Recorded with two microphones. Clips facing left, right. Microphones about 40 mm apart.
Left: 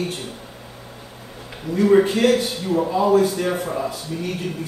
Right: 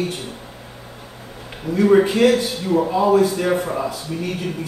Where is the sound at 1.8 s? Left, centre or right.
Centre.